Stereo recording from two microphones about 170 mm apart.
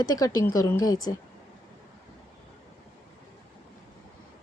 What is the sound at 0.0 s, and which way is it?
A woman's voice, 20° left (ahead or behind).